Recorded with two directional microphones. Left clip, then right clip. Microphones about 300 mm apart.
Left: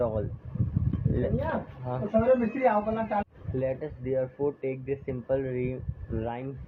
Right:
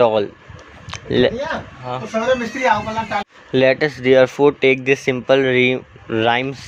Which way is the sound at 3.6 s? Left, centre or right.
Right.